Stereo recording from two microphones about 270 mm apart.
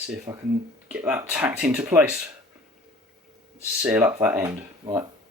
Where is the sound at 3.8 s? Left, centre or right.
Centre.